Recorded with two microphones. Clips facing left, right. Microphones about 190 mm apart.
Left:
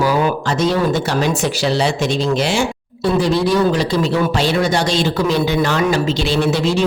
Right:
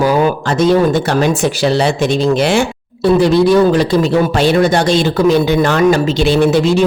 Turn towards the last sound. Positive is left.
turn(degrees=-50)  # may be behind; listen again after turning